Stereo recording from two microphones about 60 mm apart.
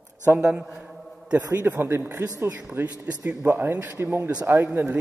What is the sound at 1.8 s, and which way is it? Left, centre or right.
Speech, right.